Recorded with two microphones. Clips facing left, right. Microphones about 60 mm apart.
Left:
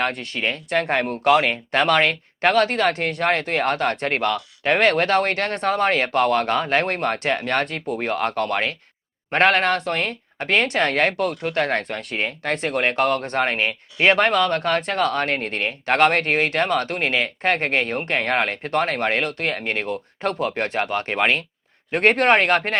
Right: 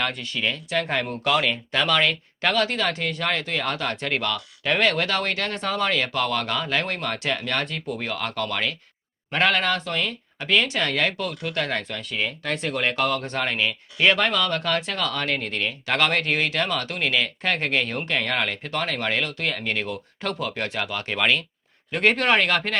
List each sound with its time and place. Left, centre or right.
0.0 s speech: left